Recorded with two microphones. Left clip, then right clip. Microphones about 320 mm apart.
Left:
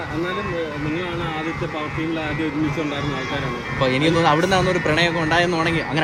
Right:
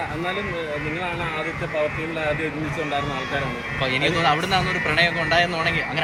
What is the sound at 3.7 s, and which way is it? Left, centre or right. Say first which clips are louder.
Speech: left 3 dB; centre.